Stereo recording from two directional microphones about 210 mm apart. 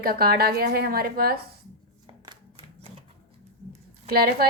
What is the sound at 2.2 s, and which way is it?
Clapping, 20° right (ahead or behind).